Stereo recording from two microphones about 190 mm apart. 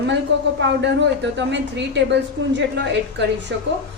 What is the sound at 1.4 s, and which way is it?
A woman's voice, 65° right (ahead or behind).